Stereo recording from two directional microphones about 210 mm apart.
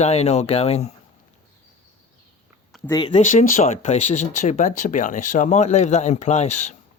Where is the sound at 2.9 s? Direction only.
25° left (ahead or behind).